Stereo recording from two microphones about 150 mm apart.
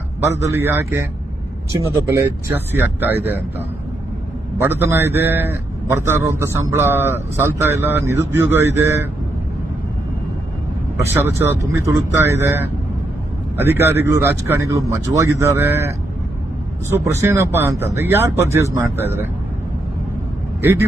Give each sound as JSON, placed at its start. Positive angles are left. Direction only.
{"t": 0.2, "sound": "a man's voice", "side_deg": -20}
{"t": 2.1, "sound": "a man's voice", "side_deg": -15}
{"t": 4.5, "sound": "a man's voice", "side_deg": -15}
{"t": 11.1, "sound": "a man's voice", "side_deg": -15}